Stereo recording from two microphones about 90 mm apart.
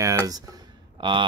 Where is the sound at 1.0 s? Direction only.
60° right (ahead or behind).